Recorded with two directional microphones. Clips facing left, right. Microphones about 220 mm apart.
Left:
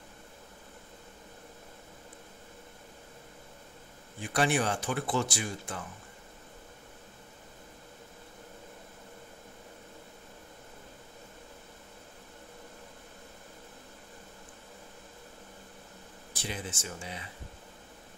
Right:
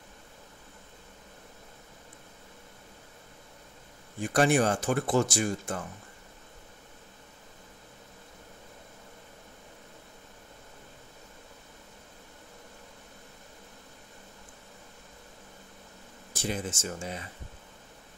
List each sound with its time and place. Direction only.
4.2 s speech: 45° right (ahead or behind)
16.3 s speech: 45° right (ahead or behind)